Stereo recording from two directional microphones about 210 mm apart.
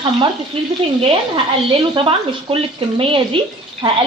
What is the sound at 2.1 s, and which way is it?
Speech, 25° right (ahead or behind).